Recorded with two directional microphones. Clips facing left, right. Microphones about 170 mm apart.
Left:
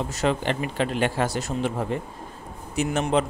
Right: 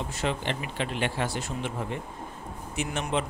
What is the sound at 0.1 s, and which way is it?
A man's voice, 40° left (ahead or behind).